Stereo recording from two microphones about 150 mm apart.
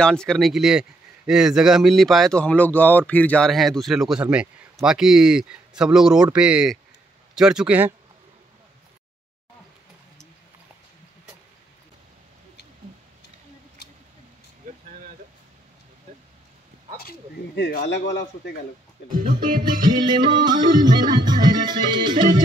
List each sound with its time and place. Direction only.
0.0 s a man's voice: 5° left (ahead or behind)
14.7 s a sound: 65° right (ahead or behind)
19.1 s music: 70° right (ahead or behind)
19.6 s music: 30° right (ahead or behind)